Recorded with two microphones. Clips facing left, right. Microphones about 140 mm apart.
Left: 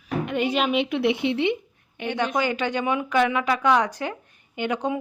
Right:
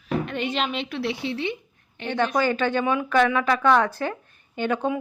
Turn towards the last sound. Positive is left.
turn(degrees=20)  # may be behind; listen again after turning